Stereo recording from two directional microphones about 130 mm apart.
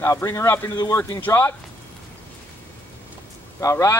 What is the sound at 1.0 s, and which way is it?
Speech, 15° left (ahead or behind).